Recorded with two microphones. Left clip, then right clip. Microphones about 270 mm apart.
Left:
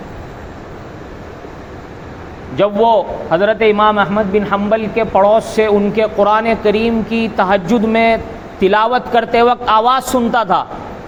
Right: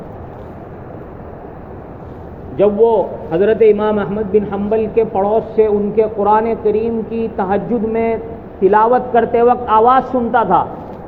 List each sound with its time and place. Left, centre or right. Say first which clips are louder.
2.8 s a man's voice: left 1 dB; left
8.7 s a man's voice: right 1 dB; left